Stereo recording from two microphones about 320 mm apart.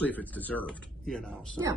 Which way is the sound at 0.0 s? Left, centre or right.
Centre.